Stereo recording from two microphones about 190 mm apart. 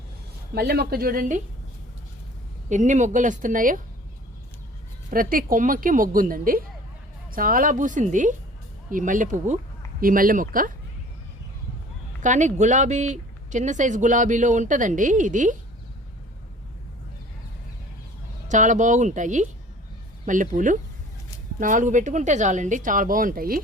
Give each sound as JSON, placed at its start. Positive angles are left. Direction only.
{"t": 0.5, "sound": "speech", "side_deg": -55}
{"t": 2.6, "sound": "speech", "side_deg": -40}
{"t": 5.1, "sound": "speech", "side_deg": -50}
{"t": 12.2, "sound": "speech", "side_deg": -40}
{"t": 18.4, "sound": "speech", "side_deg": -40}